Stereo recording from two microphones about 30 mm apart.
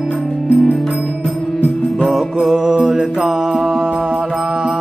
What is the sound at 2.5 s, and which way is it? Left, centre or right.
Music, right.